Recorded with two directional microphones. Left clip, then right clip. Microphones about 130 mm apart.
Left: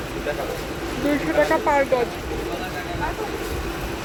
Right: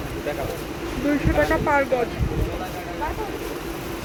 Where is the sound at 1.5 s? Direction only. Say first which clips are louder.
Even; centre (ahead or behind).